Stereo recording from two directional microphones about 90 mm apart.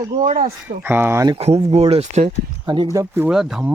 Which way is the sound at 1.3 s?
90° right.